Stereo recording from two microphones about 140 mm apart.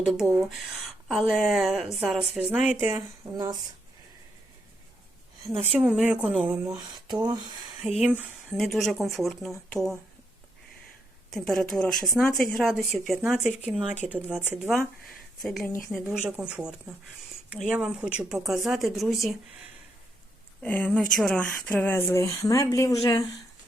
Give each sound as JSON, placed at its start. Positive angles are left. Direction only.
{"t": 0.1, "sound": "speech", "side_deg": 0}
{"t": 3.3, "sound": "speech", "side_deg": -30}
{"t": 5.7, "sound": "speech", "side_deg": -10}
{"t": 6.7, "sound": "speech", "side_deg": -30}
{"t": 7.9, "sound": "speech", "side_deg": 0}
{"t": 11.3, "sound": "speech", "side_deg": 0}
{"t": 20.6, "sound": "speech", "side_deg": 10}
{"t": 21.5, "sound": "speech", "side_deg": 15}